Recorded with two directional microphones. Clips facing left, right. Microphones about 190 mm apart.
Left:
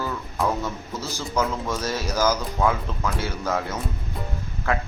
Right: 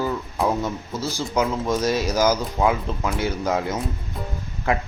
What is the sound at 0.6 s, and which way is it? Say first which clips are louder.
Speech: right 4 dB; 10° right (ahead or behind).